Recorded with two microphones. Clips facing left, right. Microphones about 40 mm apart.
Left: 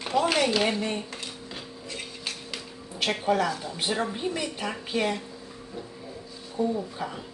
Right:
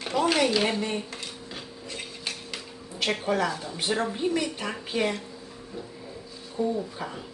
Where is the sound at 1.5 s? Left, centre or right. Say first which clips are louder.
Even; centre.